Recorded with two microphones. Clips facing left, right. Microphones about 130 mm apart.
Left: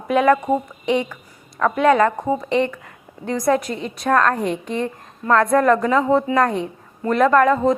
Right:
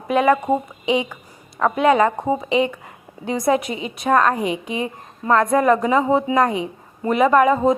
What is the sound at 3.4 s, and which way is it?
A woman's voice, 5° right (ahead or behind).